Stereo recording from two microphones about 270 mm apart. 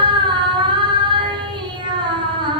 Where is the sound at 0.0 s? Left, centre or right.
Centre.